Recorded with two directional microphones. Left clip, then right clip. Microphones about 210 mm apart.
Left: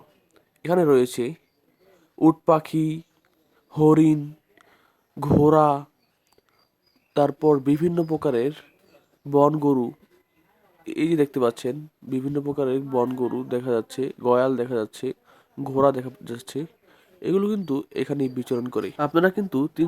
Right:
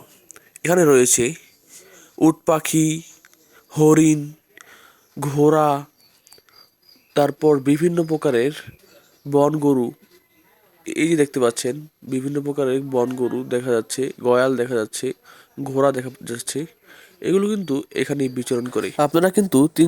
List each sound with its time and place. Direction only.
0.3 s speech: 10° right (ahead or behind)
3.7 s a sound: 5° right (ahead or behind)
7.1 s speech: 5° right (ahead or behind)
18.9 s speech: 35° right (ahead or behind)